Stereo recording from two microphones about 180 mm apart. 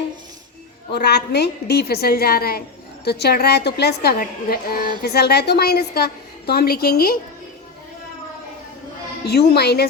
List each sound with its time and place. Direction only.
0.9 s a woman's voice: 65° left (ahead or behind)
9.2 s a woman's voice: 65° left (ahead or behind)